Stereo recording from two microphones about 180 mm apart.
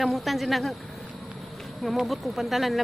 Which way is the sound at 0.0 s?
Centre (ahead or behind).